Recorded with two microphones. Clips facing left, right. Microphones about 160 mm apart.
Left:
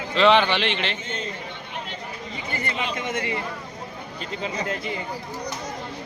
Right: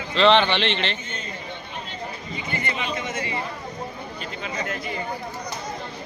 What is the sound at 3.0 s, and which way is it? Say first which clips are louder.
Chatter: left 2 dB; 60° left (ahead or behind).